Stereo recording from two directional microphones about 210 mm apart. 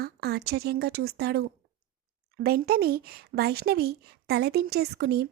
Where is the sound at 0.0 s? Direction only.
50° right (ahead or behind).